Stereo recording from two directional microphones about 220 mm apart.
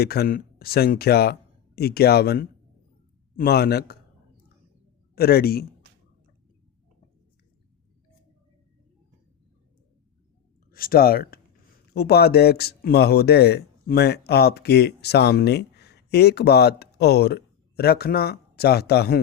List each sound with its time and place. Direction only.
0.0 s speech: 45° left (ahead or behind)
5.1 s speech: 45° left (ahead or behind)
10.7 s speech: 40° left (ahead or behind)